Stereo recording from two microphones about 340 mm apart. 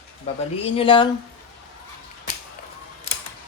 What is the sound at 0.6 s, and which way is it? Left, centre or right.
Speech, centre.